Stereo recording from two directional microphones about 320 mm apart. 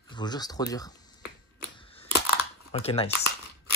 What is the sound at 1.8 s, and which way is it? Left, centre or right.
Crushing, centre.